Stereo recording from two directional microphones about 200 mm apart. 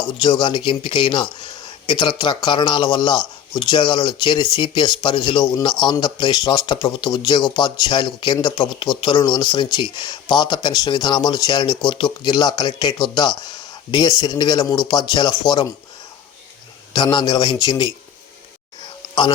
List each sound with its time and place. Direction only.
0.0 s speech: 20° left (ahead or behind)
16.9 s speech: 20° left (ahead or behind)